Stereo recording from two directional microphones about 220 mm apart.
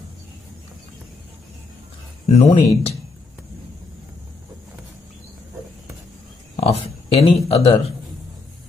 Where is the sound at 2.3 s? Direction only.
30° left (ahead or behind).